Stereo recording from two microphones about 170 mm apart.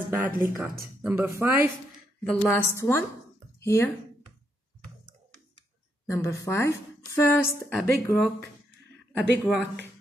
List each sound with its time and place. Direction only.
0.2 s speech: 15° right (ahead or behind)
2.2 s a woman's voice: 10° left (ahead or behind)
6.0 s a woman's voice: 15° left (ahead or behind)
7.7 s a woman's voice: 5° left (ahead or behind)